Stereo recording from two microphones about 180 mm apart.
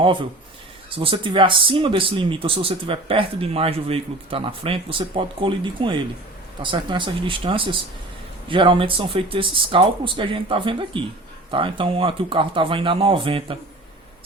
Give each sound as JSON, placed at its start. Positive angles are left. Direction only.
{"t": 0.0, "sound": "speech", "side_deg": -30}